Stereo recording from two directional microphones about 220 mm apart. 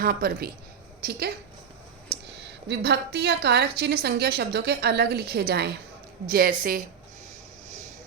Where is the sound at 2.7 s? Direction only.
50° right (ahead or behind).